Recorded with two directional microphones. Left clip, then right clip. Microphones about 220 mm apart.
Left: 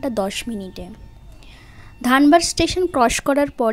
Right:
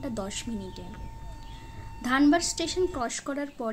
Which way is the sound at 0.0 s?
40° left (ahead or behind).